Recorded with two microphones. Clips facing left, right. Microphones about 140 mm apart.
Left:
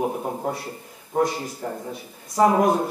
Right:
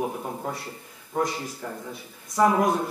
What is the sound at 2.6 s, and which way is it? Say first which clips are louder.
Speech: left 3 dB; 40° left (ahead or behind).